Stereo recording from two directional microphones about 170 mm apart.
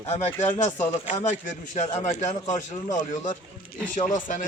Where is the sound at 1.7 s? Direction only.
40° left (ahead or behind).